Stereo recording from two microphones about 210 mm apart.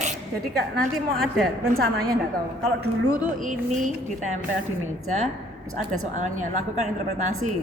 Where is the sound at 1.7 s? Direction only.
45° right (ahead or behind).